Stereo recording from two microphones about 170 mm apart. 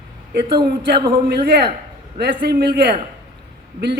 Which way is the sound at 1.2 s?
70° right (ahead or behind).